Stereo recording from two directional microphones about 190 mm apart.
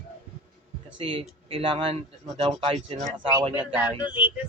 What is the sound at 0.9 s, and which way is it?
Speech, 25° right (ahead or behind).